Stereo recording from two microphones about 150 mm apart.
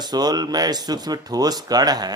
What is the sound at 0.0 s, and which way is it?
Speech, 25° right (ahead or behind).